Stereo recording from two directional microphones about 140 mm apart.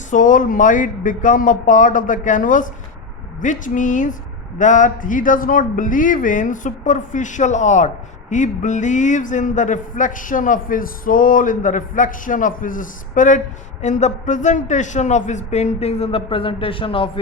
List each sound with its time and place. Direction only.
0.1 s speech: 70° left (ahead or behind); by 17.1 s 40° left (ahead or behind)